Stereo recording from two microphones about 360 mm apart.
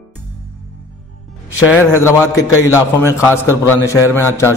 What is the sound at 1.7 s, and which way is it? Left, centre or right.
A man's voice, centre.